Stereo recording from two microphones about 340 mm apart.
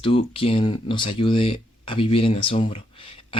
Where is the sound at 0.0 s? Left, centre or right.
Centre.